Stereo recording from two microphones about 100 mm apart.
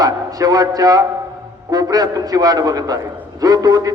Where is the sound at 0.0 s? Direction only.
40° right (ahead or behind).